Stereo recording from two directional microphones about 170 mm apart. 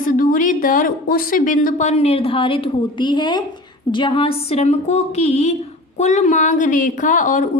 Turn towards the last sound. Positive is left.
turn(degrees=50)  # may be behind; listen again after turning